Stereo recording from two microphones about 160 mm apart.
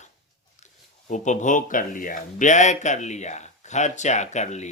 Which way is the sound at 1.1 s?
50° left (ahead or behind).